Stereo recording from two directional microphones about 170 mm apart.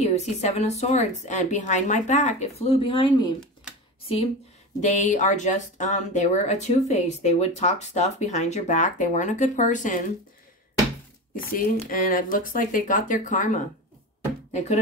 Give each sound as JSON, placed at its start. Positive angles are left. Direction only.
{"t": 0.0, "sound": "a woman's voice", "side_deg": 40}
{"t": 4.7, "sound": "speech", "side_deg": 45}
{"t": 11.9, "sound": "speech", "side_deg": 55}